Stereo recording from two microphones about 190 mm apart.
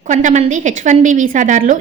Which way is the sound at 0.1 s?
40° right (ahead or behind).